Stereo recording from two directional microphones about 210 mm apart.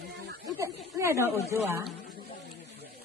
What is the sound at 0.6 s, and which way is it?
Speech, 10° right (ahead or behind).